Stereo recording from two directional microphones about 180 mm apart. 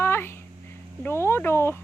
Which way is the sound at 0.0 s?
15° left (ahead or behind).